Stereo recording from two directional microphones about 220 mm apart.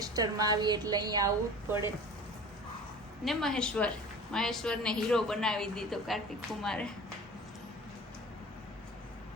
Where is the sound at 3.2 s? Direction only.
5° left (ahead or behind).